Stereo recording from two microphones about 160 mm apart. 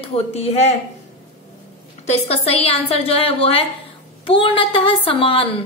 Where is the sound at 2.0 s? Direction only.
45° left (ahead or behind).